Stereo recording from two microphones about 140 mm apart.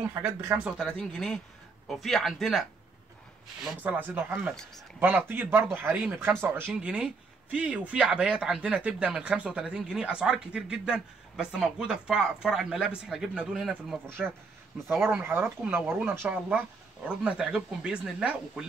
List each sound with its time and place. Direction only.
0.2 s speech: 15° right (ahead or behind)
0.7 s speech: 5° left (ahead or behind)
3.8 s speech: 10° right (ahead or behind)
4.5 s speech: centre (ahead or behind)
5.0 s speech: 15° right (ahead or behind)
14.0 s speech: 15° right (ahead or behind)